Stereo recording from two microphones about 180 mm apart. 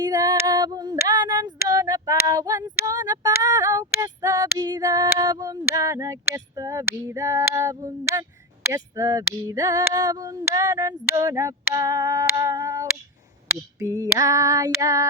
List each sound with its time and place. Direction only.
0.0 s female singing: 20° right (ahead or behind)